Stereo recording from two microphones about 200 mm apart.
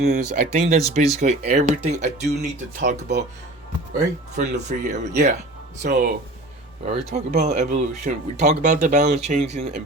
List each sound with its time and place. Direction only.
0.0 s speech: 35° right (ahead or behind)
4.4 s speech: 35° right (ahead or behind)